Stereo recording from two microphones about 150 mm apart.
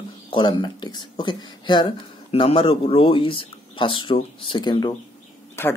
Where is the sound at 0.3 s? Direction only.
30° left (ahead or behind).